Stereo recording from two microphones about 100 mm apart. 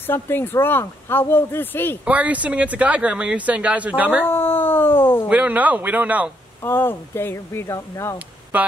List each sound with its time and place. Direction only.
0.0 s speech: 20° left (ahead or behind)
2.0 s speech: 15° right (ahead or behind)
4.3 s speech: 20° left (ahead or behind)
5.3 s speech: 15° right (ahead or behind)
6.6 s speech: 20° left (ahead or behind)
8.5 s speech: 15° right (ahead or behind)